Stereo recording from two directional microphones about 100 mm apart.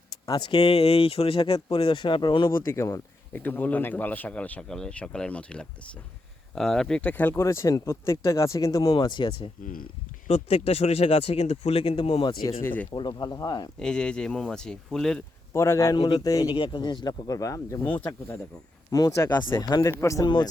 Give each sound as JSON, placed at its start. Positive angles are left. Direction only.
{"t": 0.3, "sound": "speech", "side_deg": 45}
{"t": 0.6, "sound": "speech", "side_deg": 75}
{"t": 2.6, "sound": "a man's voice", "side_deg": 30}
{"t": 7.1, "sound": "speech", "side_deg": 20}
{"t": 7.4, "sound": "speech", "side_deg": 30}
{"t": 8.9, "sound": "speech", "side_deg": 50}
{"t": 10.2, "sound": "speech", "side_deg": 85}
{"t": 12.6, "sound": "a man's voice", "side_deg": 15}
{"t": 12.9, "sound": "speech", "side_deg": 45}
{"t": 13.7, "sound": "a man's voice", "side_deg": 10}
{"t": 15.5, "sound": "speech", "side_deg": 30}
{"t": 19.8, "sound": "speech", "side_deg": 30}
{"t": 20.2, "sound": "speech", "side_deg": 45}